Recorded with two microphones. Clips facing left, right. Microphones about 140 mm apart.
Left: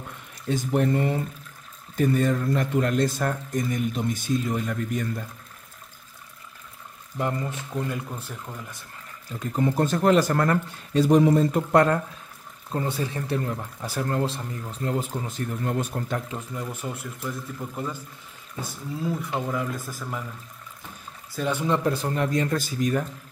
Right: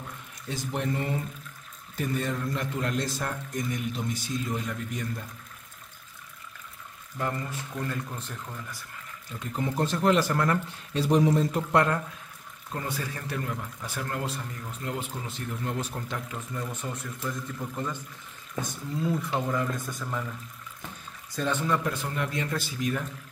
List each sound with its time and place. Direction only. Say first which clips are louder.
0.5 s speech: left 8 dB; 50° left (ahead or behind)
7.2 s speech: left 4 dB; 20° left (ahead or behind)
7.9 s speech: left 2 dB; 10° left (ahead or behind)
9.6 s speech: left 5 dB; 45° left (ahead or behind)
12.7 s speech: left 6 dB; 25° left (ahead or behind); by 16.2 s 50° left (ahead or behind)
16.3 s speech: left 2 dB; 10° left (ahead or behind)
21.4 s speech: left 2 dB; 10° left (ahead or behind)
21.6 s speech: left 5 dB; 30° left (ahead or behind)